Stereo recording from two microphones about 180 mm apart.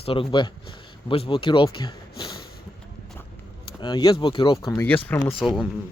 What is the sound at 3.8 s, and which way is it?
Speech, 25° left (ahead or behind).